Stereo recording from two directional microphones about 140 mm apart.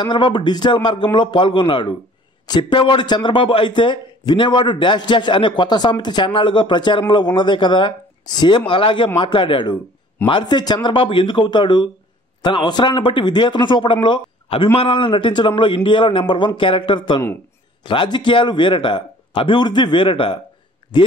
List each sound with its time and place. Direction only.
0.0 s a man's voice: 35° left (ahead or behind)